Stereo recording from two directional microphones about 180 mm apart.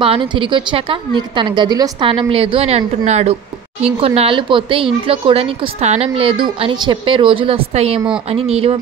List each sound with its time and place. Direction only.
0.0 s a woman's voice: 30° right (ahead or behind)